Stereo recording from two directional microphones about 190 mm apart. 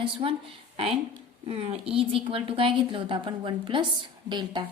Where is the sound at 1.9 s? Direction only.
30° right (ahead or behind).